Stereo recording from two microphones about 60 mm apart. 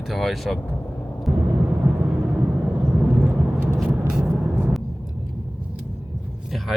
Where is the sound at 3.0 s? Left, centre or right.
Right.